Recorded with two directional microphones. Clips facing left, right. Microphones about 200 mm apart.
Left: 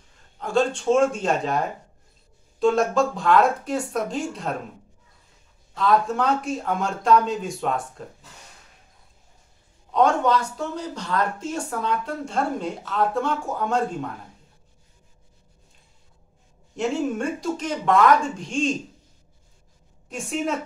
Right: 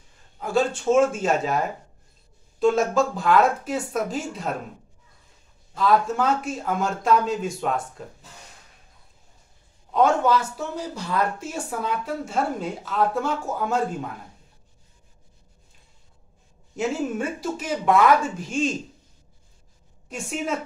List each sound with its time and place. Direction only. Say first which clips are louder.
0.4 s speech: left 1 dB; 5° right (ahead or behind)
5.8 s speech: even; centre (ahead or behind)
9.9 s speech: even; 5° right (ahead or behind)
16.7 s speech: left 1 dB; 5° right (ahead or behind)
20.1 s speech: left 2 dB; centre (ahead or behind)